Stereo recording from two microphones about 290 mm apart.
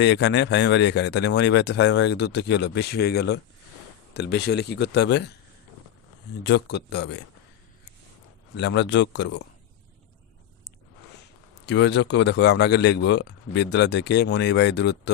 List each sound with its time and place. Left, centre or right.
0.0 s speech: left
6.4 s speech: left
8.5 s speech: left
11.6 s speech: left